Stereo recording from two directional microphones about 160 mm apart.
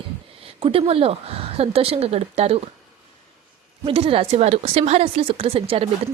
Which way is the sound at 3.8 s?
35° right (ahead or behind).